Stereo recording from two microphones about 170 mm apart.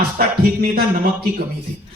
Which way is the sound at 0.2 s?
55° right (ahead or behind).